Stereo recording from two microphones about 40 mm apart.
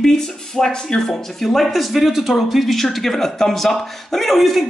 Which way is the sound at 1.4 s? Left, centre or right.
Centre.